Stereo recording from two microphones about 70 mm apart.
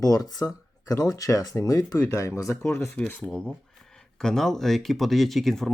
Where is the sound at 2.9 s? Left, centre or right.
Left.